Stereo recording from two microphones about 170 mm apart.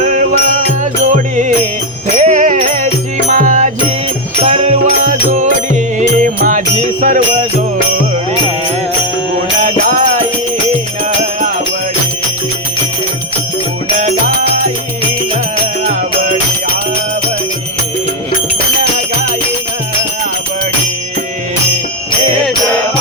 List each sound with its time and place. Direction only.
0.0 s music: 45° right (ahead or behind)
4.4 s music: 35° right (ahead or behind)
9.6 s music: 50° right (ahead or behind)
11.2 s music: 45° right (ahead or behind)